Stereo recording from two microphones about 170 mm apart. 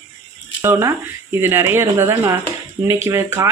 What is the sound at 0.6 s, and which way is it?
A woman's voice, 15° right (ahead or behind).